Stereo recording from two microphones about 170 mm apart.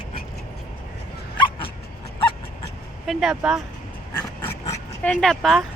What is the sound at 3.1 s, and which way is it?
Speech, centre (ahead or behind).